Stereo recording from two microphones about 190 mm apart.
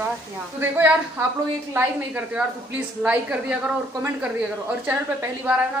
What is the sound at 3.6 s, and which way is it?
A woman's voice, 10° right (ahead or behind).